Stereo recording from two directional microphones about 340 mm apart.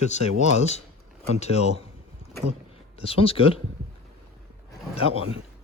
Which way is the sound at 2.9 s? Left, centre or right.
Centre.